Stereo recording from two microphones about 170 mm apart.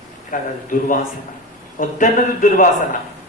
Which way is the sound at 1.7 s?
50° left (ahead or behind).